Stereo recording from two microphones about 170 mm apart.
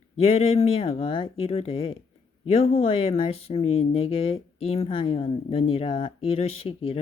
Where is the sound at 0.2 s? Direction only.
35° left (ahead or behind).